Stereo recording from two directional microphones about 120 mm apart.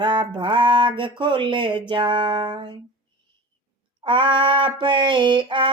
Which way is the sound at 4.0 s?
45° right (ahead or behind).